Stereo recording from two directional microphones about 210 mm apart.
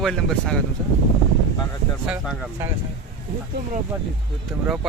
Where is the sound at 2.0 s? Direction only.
5° right (ahead or behind).